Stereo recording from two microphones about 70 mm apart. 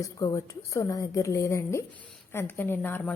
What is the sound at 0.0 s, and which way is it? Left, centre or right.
A woman's voice, left.